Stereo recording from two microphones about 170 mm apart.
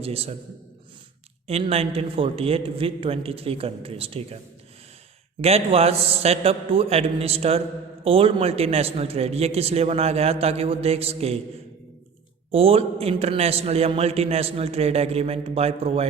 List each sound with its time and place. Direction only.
0.0 s a man's voice: 35° right (ahead or behind)
1.5 s a man's voice: 35° right (ahead or behind)
5.4 s a man's voice: 35° right (ahead or behind)
12.5 s a man's voice: 35° right (ahead or behind)